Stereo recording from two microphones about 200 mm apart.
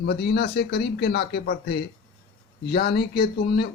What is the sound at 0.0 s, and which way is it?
Speech, 55° left (ahead or behind).